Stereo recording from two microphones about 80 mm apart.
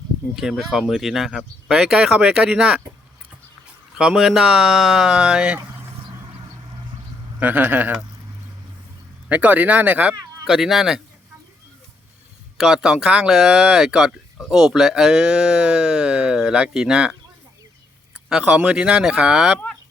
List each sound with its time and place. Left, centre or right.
0.3 s speech: centre
3.9 s speech: centre
7.3 s speech: right
9.3 s speech: right
10.5 s speech: centre
12.5 s speech: centre
18.3 s speech: centre